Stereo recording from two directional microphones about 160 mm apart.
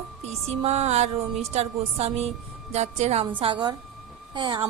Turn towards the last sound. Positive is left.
turn(degrees=-30)  # may be behind; listen again after turning